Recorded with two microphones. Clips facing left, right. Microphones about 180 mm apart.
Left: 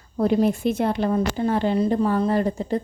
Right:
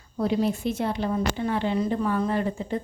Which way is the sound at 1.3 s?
40° left (ahead or behind).